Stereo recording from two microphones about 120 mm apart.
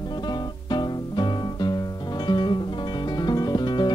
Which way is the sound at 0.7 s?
40° left (ahead or behind).